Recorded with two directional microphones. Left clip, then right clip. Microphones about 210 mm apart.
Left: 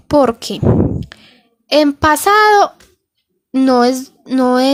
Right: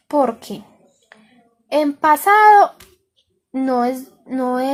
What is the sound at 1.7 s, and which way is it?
A woman's voice, 35° left (ahead or behind).